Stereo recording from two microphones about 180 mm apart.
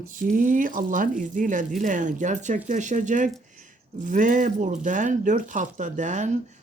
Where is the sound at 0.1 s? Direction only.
50° right (ahead or behind).